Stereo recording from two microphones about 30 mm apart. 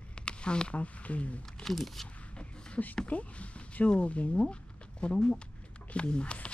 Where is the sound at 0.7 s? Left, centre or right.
Left.